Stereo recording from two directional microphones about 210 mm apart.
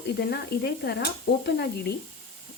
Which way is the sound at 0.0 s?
50° left (ahead or behind).